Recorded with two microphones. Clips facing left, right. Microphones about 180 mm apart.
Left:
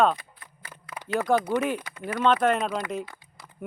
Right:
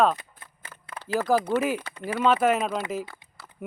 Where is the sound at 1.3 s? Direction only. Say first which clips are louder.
Right 1 dB; 5° right (ahead or behind).